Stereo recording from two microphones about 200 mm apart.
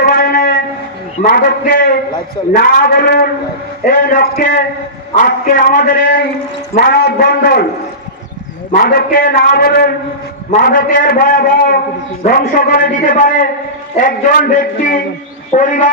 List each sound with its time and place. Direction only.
0.0 s a sound: 45° left (ahead or behind)
1.2 s a man's voice: 45° left (ahead or behind)
8.7 s a man's voice: 45° left (ahead or behind)